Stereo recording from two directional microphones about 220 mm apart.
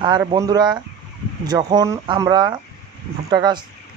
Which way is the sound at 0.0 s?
20° right (ahead or behind).